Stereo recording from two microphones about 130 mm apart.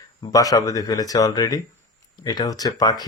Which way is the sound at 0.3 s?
25° left (ahead or behind).